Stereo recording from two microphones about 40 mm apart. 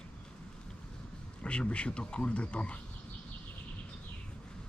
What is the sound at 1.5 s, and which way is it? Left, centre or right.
Speech, left.